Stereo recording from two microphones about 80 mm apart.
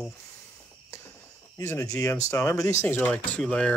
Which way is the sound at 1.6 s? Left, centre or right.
Left.